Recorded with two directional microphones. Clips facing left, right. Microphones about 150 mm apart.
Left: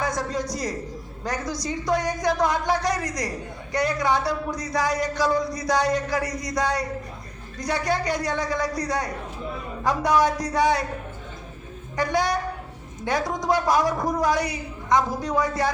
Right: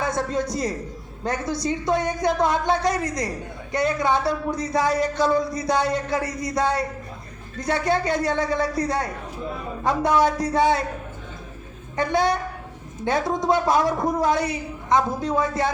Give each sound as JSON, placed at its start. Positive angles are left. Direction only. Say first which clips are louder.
{"t": 0.0, "sound": "speech", "louder": "right 2 dB", "side_deg": -25}
{"t": 11.9, "sound": "speech", "louder": "right 2 dB", "side_deg": -25}